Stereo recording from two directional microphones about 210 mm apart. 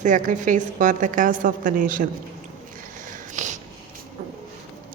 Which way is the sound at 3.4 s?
35° right (ahead or behind).